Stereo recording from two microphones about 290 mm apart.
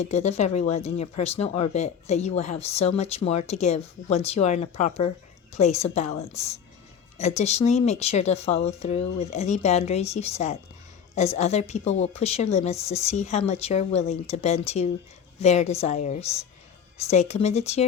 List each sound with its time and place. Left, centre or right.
0.0 s speech: left